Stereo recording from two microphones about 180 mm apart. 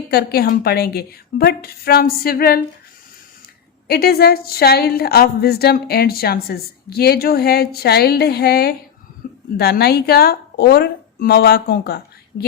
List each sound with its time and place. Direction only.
0.1 s a woman's voice: 60° left (ahead or behind)
3.8 s a woman's voice: 60° left (ahead or behind)
9.2 s a sound: 55° left (ahead or behind)
9.6 s a woman's voice: 65° left (ahead or behind)